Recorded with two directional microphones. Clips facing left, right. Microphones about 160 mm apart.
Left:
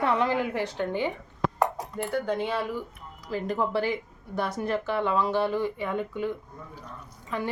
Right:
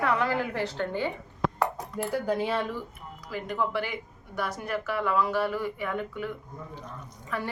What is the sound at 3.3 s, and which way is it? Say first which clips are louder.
A woman's voice: left 3 dB; 30° left (ahead or behind).